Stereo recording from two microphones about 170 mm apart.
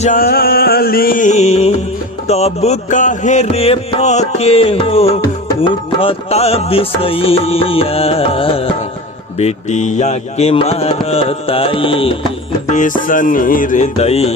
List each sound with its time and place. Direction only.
0.0 s music: 55° left (ahead or behind); by 8.7 s 35° left (ahead or behind)
9.4 s music: 45° left (ahead or behind)
12.7 s music: 50° left (ahead or behind)